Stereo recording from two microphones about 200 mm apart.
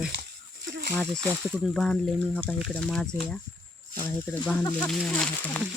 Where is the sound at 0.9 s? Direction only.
Centre (ahead or behind).